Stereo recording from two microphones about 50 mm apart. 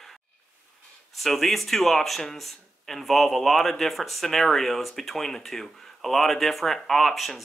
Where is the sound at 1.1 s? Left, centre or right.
Centre.